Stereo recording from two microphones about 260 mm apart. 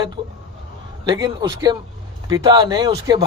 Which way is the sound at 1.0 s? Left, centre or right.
Centre.